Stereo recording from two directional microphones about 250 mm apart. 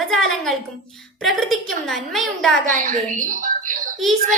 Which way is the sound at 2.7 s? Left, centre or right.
Right.